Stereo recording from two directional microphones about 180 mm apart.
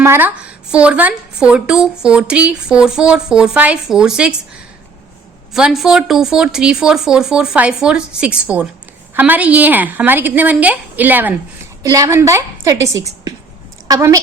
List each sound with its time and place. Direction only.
0.0 s speech: 10° right (ahead or behind)
5.5 s a woman's voice: 5° right (ahead or behind); by 14.2 s 20° right (ahead or behind)